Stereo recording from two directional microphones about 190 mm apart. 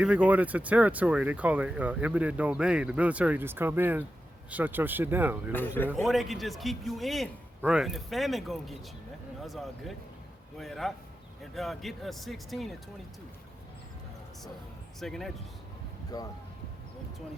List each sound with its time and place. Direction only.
0.0 s speech: 10° right (ahead or behind)
5.5 s speech: 10° left (ahead or behind)
6.1 s speech: centre (ahead or behind)
15.0 s speech: centre (ahead or behind)
16.1 s speech: 20° left (ahead or behind)